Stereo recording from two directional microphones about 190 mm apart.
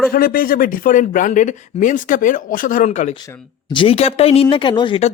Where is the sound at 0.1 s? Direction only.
50° left (ahead or behind).